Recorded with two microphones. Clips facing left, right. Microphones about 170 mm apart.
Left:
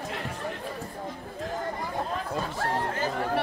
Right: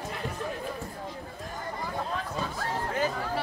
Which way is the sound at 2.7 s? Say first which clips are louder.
Right 1 dB; 60° left (ahead or behind).